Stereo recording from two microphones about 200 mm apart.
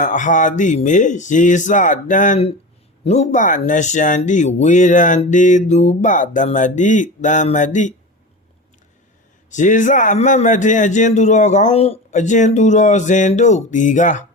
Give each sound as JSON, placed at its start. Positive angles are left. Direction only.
{"t": 0.0, "sound": "speech", "side_deg": 40}
{"t": 9.5, "sound": "speech", "side_deg": 40}